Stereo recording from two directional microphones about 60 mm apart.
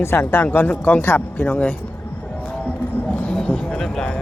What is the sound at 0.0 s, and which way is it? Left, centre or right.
Speech, left.